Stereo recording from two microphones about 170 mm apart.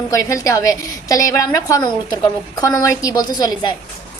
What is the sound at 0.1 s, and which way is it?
Speech, 20° left (ahead or behind).